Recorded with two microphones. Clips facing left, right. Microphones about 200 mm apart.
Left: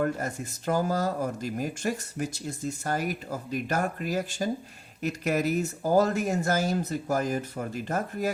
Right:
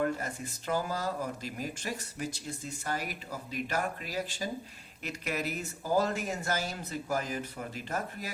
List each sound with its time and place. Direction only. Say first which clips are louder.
0.0 s speech: left 3 dB; 45° left (ahead or behind)